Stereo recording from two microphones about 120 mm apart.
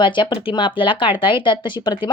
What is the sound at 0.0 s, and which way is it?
Speech, 45° left (ahead or behind).